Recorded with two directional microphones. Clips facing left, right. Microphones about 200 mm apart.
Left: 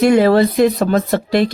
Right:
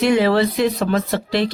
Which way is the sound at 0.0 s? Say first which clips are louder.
Left 5 dB; 45° left (ahead or behind).